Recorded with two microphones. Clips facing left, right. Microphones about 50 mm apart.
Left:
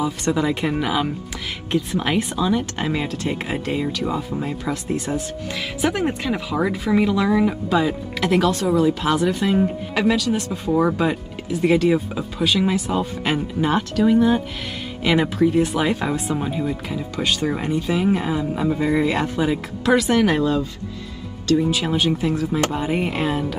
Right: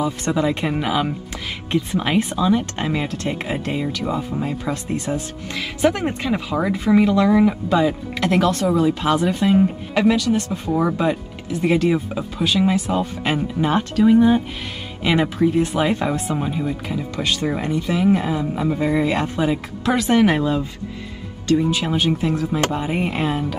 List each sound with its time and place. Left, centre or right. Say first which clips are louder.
0.0 s speech: right 1 dB; centre
20.1 s speech: right 1 dB; centre
21.5 s speech: even; centre